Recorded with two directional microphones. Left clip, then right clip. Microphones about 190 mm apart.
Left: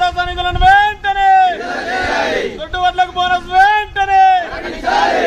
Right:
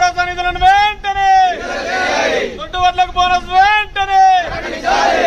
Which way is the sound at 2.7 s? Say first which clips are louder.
Right 1 dB; 5° right (ahead or behind).